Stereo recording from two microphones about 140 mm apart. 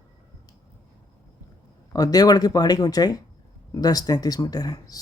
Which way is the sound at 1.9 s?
25° left (ahead or behind).